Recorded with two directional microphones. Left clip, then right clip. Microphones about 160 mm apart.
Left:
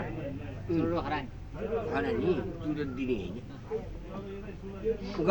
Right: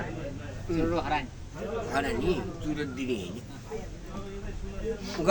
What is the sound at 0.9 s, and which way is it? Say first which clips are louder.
Speech: right 3 dB; 70° right (ahead or behind).